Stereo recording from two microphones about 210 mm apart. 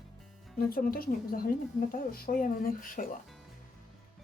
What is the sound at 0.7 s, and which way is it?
Speech, 45° left (ahead or behind).